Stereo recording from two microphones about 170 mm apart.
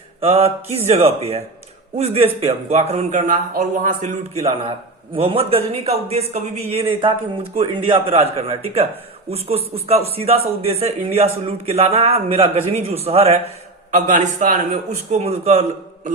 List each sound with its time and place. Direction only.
0.2 s a man's voice: 35° right (ahead or behind)
13.9 s a man's voice: 50° right (ahead or behind)